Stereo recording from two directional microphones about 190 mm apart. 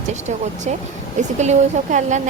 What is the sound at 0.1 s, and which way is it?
Speech, 35° right (ahead or behind).